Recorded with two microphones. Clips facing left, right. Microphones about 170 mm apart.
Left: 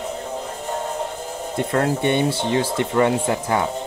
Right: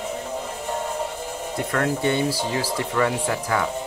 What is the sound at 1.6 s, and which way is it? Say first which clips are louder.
Speech: left 3 dB; 25° left (ahead or behind).